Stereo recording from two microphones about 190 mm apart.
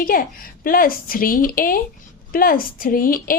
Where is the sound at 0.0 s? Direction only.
50° left (ahead or behind).